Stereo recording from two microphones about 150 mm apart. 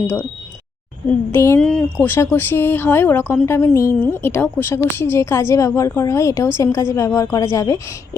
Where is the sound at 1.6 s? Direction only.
5° left (ahead or behind).